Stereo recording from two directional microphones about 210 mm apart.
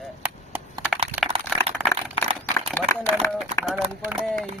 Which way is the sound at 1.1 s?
10° left (ahead or behind).